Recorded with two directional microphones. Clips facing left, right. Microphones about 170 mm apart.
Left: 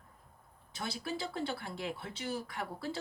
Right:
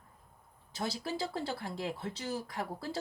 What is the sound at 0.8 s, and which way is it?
A woman's voice, 35° right (ahead or behind).